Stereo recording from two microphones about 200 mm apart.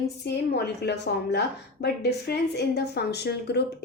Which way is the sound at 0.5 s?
55° left (ahead or behind).